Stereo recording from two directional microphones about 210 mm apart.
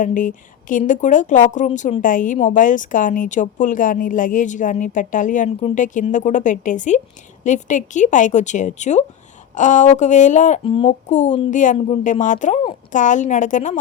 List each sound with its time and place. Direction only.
0.0 s a woman's voice: 40° left (ahead or behind)